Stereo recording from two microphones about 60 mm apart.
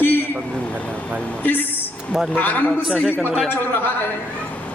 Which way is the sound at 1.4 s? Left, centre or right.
Left.